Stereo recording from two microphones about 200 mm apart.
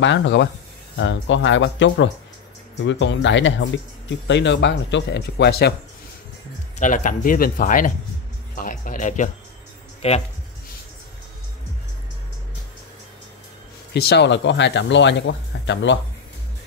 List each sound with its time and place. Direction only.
0.0 s speech: 65° left (ahead or behind)
6.8 s speech: 40° left (ahead or behind)
13.9 s speech: 55° left (ahead or behind)